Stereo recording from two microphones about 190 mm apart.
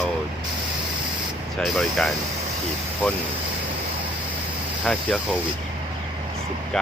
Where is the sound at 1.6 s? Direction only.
Centre (ahead or behind).